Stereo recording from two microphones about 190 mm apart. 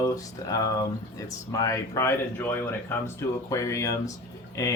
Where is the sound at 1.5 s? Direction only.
15° left (ahead or behind).